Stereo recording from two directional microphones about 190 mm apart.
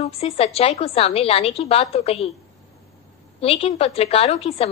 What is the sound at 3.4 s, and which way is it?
A woman's voice, 30° left (ahead or behind).